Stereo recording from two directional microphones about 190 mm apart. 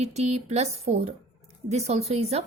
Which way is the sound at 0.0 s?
35° right (ahead or behind).